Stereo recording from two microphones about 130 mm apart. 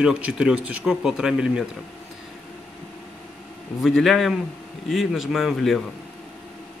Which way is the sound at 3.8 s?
Centre (ahead or behind).